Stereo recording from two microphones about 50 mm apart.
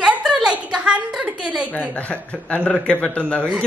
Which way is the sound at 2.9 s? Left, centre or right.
Left.